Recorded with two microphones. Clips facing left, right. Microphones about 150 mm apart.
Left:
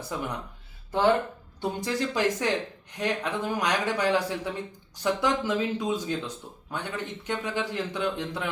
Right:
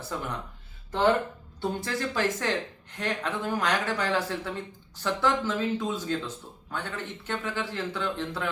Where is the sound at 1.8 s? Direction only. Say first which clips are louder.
Left 4 dB; 15° left (ahead or behind).